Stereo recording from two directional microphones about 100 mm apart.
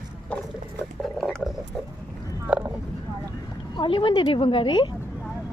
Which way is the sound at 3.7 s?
55° left (ahead or behind).